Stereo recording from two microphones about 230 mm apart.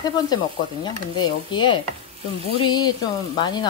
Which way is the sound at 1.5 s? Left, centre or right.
Centre.